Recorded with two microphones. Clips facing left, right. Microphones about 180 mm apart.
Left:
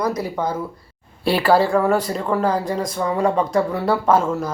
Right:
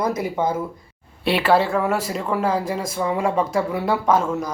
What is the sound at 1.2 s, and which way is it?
Speech, centre (ahead or behind).